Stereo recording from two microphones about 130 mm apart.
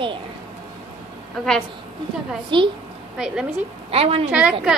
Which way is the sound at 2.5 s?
40° right (ahead or behind).